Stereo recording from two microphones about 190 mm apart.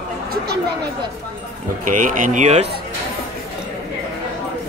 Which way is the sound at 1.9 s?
45° right (ahead or behind).